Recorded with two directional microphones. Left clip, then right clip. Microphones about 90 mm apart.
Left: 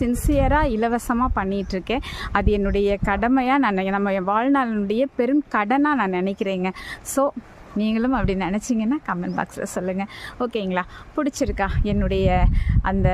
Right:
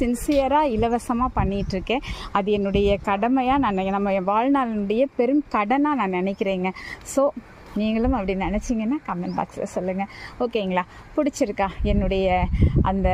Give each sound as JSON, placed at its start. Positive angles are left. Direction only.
{"t": 0.0, "sound": "speech", "side_deg": 10}
{"t": 0.5, "sound": "speech", "side_deg": 25}
{"t": 10.4, "sound": "speech", "side_deg": 15}